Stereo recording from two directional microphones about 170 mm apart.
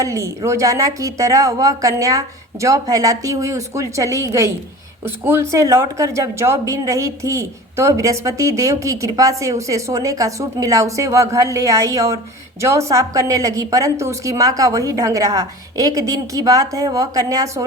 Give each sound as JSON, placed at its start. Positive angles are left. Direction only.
{"t": 0.0, "sound": "a woman's voice", "side_deg": -20}